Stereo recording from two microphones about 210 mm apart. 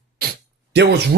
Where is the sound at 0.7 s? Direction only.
55° right (ahead or behind).